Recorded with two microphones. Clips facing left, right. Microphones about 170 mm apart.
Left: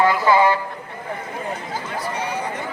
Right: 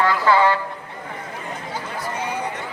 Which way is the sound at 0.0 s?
15° left (ahead or behind).